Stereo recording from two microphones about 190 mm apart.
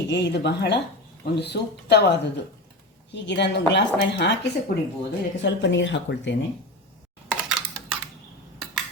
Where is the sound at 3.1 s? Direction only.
65° left (ahead or behind).